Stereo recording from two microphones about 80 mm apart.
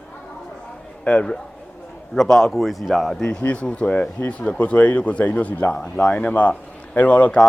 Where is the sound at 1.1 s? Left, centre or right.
Centre.